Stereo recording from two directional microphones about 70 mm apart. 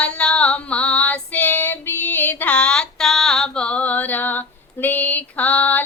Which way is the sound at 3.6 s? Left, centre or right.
Centre.